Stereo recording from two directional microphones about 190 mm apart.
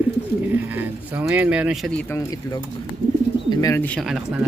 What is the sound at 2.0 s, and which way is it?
Speech, 15° left (ahead or behind).